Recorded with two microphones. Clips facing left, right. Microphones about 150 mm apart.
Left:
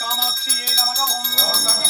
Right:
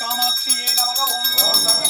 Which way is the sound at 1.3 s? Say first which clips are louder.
Right 1 dB; 10° right (ahead or behind).